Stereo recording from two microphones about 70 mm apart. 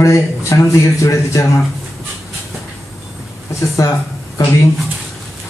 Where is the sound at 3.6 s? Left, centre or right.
Left.